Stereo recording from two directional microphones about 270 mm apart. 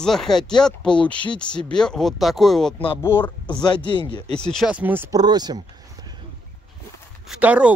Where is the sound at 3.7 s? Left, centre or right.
Centre.